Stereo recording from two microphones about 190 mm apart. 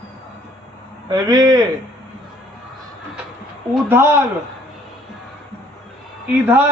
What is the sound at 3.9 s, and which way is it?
Speech, 10° right (ahead or behind).